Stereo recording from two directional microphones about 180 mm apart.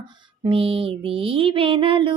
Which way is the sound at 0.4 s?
30° right (ahead or behind).